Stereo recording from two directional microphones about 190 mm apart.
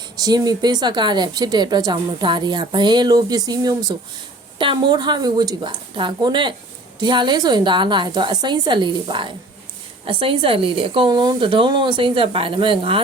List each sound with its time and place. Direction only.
0.2 s a woman's voice: 20° right (ahead or behind)